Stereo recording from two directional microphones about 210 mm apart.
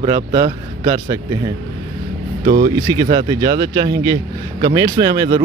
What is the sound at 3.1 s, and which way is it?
Speech, 20° right (ahead or behind).